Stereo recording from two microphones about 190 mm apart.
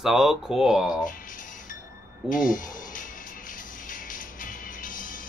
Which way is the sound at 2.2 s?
45° left (ahead or behind).